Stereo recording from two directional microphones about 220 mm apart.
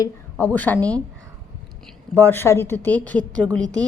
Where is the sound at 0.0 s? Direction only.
10° left (ahead or behind).